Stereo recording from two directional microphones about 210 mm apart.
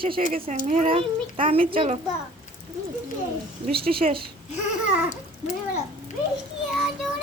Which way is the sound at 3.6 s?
45° right (ahead or behind).